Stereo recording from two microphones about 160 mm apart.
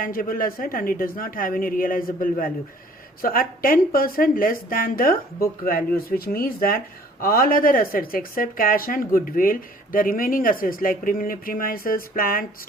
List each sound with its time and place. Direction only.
0.0 s speech: 60° left (ahead or behind)